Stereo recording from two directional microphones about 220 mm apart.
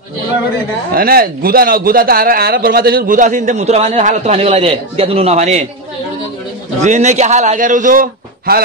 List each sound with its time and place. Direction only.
0.9 s a man's voice: 40° right (ahead or behind)
6.8 s a man's voice: 35° right (ahead or behind)